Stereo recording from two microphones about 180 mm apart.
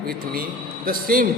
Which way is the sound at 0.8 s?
50° right (ahead or behind).